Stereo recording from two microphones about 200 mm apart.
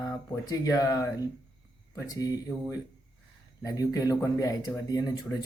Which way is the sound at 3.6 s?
20° left (ahead or behind).